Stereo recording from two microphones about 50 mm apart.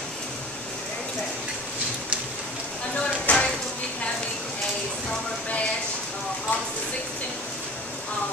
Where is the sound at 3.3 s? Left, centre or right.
Left.